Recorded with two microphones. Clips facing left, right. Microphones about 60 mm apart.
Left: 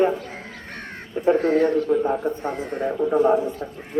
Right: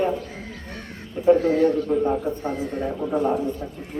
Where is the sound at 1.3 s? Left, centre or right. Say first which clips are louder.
Even; left.